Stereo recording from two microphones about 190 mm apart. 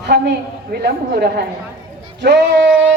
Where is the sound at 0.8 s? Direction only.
60° right (ahead or behind).